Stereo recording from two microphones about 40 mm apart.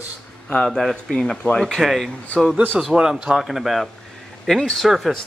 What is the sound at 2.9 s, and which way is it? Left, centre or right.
Speech, centre.